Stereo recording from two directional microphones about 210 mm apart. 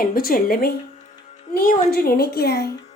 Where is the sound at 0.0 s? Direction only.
45° left (ahead or behind).